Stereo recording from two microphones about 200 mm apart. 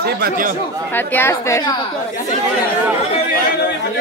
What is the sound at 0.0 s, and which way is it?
Speech, 50° right (ahead or behind).